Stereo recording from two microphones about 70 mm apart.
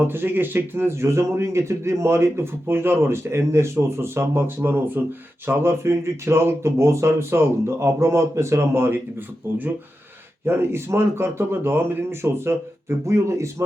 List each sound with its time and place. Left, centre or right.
0.0 s a man's voice: right